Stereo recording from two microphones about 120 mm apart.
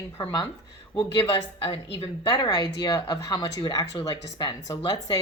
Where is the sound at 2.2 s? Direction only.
35° left (ahead or behind).